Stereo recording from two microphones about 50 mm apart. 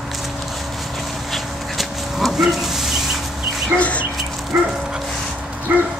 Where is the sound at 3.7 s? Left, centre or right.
Left.